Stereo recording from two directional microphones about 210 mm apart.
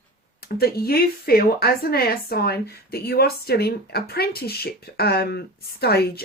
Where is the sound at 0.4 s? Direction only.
45° left (ahead or behind).